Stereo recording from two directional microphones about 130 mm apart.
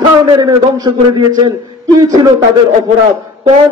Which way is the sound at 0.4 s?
25° right (ahead or behind).